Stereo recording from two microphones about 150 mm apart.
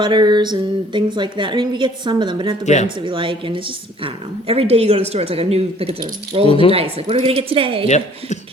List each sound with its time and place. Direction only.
0.0 s a sound: 30° right (ahead or behind)
0.9 s a woman's voice: 30° right (ahead or behind)
2.6 s speech: 50° left (ahead or behind)
2.9 s a woman's voice: 35° right (ahead or behind)
7.9 s speech: 50° left (ahead or behind)